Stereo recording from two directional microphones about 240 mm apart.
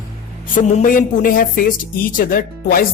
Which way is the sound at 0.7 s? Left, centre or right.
Left.